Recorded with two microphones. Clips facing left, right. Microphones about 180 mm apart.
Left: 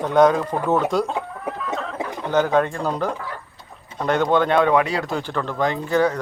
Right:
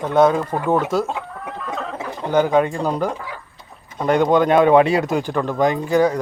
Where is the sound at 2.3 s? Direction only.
10° right (ahead or behind).